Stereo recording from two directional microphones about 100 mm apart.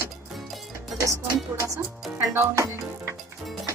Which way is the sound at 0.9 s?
30° right (ahead or behind).